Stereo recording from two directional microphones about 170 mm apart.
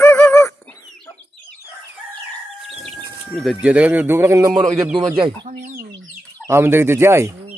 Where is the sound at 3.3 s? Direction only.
Centre (ahead or behind); by 4.6 s 20° right (ahead or behind).